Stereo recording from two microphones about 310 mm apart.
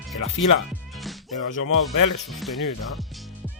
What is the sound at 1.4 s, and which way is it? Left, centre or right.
Speech, left.